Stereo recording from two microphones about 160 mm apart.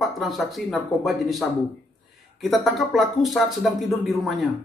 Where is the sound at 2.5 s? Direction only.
Centre (ahead or behind).